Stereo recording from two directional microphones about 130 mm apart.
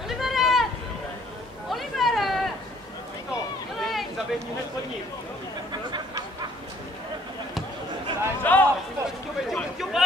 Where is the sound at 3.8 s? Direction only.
Centre (ahead or behind).